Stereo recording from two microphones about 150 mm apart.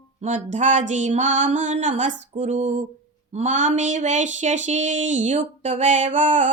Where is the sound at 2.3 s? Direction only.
55° right (ahead or behind).